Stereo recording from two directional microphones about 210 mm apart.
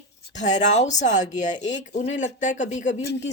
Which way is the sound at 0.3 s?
35° left (ahead or behind).